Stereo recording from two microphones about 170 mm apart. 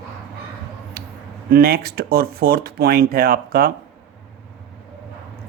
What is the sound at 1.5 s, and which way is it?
Speech, 60° right (ahead or behind).